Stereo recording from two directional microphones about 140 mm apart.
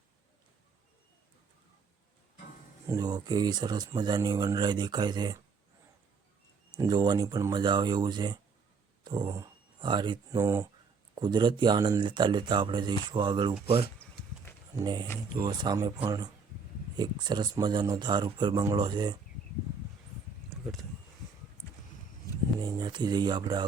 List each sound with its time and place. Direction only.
2.8 s speech: 30° right (ahead or behind)
6.7 s speech: 30° right (ahead or behind)
10.4 s speech: 25° right (ahead or behind)
14.8 s speech: 30° right (ahead or behind)
22.3 s a sound: 25° left (ahead or behind)
22.6 s speech: 30° right (ahead or behind)